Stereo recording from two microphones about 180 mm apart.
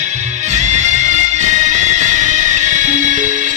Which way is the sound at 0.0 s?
40° right (ahead or behind).